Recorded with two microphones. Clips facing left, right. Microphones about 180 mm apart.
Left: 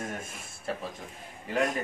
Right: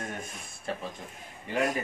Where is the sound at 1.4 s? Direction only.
Centre (ahead or behind).